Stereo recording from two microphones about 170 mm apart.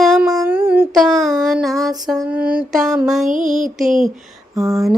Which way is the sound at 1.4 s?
Centre (ahead or behind).